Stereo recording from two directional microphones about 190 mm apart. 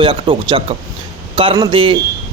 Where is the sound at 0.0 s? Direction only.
25° right (ahead or behind).